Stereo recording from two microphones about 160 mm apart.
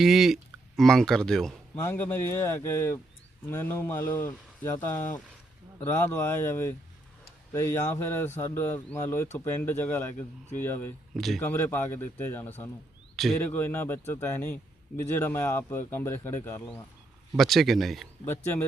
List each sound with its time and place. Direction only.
0.0 s speech: centre (ahead or behind)
1.7 s a man's voice: 15° left (ahead or behind)
11.1 s a man's voice: centre (ahead or behind)
17.3 s speech: centre (ahead or behind)
18.3 s a man's voice: 15° left (ahead or behind)